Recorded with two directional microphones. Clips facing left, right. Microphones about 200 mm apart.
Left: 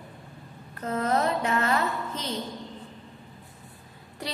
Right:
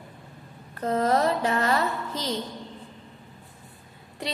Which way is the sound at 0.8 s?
35° right (ahead or behind).